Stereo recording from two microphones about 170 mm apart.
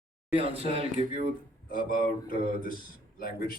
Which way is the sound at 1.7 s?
55° left (ahead or behind).